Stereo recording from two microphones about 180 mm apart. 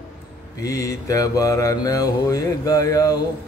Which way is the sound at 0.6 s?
20° left (ahead or behind).